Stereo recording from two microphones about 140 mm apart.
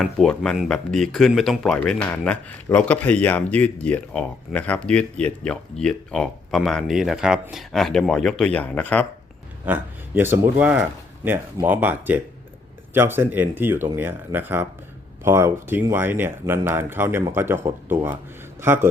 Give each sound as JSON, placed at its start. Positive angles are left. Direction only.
{"t": 0.0, "sound": "speech", "side_deg": 5}
{"t": 9.6, "sound": "a man's voice", "side_deg": -15}